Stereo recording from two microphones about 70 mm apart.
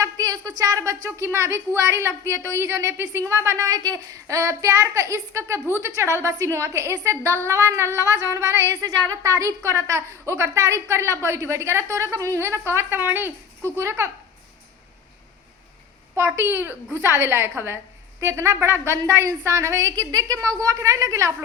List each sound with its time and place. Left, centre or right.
0.0 s a woman's voice: right
3.7 s a woman's voice: right
4.3 s a woman's voice: right
16.1 s a woman's voice: right
20.0 s a woman's voice: right